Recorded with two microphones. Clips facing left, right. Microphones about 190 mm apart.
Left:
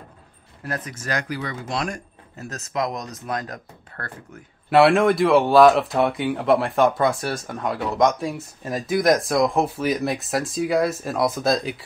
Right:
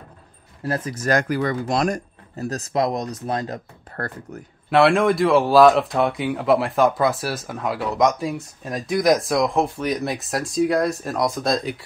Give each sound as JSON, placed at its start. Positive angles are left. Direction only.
{"t": 0.7, "sound": "speech", "side_deg": -30}
{"t": 1.0, "sound": "speech", "side_deg": -50}
{"t": 4.6, "sound": "speech", "side_deg": 0}